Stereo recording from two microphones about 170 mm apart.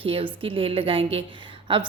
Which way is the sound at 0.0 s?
30° right (ahead or behind).